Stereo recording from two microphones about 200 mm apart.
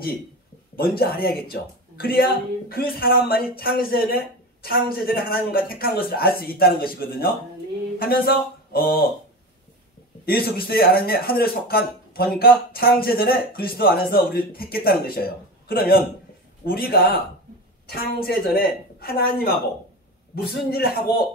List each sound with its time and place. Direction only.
0.7 s speech: 50° left (ahead or behind)
10.2 s speech: 50° left (ahead or behind)